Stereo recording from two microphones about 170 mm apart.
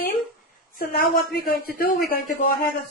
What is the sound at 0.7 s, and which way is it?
A woman's voice, 60° left (ahead or behind).